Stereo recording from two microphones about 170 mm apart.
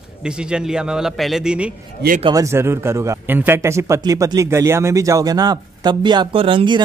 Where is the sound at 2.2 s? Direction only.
20° right (ahead or behind).